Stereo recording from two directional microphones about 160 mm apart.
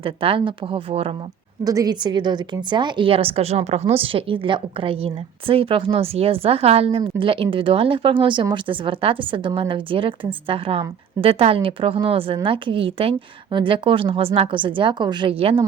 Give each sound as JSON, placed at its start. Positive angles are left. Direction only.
{"t": 0.0, "sound": "speech", "side_deg": -35}
{"t": 1.6, "sound": "speech", "side_deg": -25}